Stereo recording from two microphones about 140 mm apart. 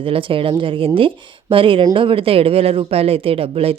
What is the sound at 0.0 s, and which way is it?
Speech, 40° right (ahead or behind).